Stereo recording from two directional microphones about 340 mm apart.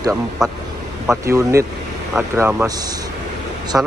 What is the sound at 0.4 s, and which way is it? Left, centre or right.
Speech, centre.